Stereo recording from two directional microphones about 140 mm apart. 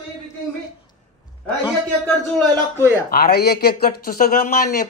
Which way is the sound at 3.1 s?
90° left.